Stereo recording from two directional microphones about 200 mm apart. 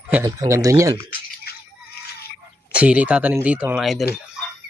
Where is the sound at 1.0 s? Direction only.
50° left (ahead or behind).